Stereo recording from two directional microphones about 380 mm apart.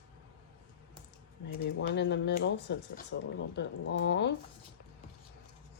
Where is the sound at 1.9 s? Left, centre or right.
Left.